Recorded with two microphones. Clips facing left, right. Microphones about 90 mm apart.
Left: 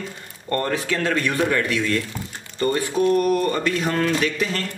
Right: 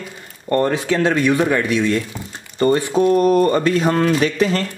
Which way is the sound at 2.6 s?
30° right (ahead or behind).